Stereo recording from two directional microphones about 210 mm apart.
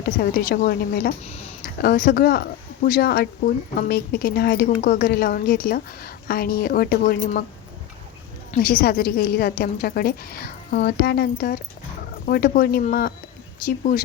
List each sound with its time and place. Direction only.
0.0 s a woman's voice: 45° left (ahead or behind)
1.2 s speech: 30° left (ahead or behind)
1.6 s a woman's voice: 45° left (ahead or behind)
8.5 s a woman's voice: 45° left (ahead or behind)